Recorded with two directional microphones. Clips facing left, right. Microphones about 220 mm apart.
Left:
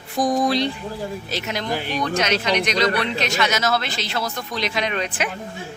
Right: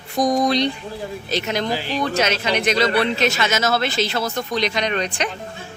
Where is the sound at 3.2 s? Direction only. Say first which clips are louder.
Right 2 dB; 5° right (ahead or behind).